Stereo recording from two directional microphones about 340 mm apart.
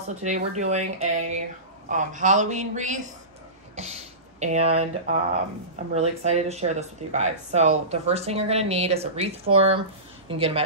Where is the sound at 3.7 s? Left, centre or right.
Centre.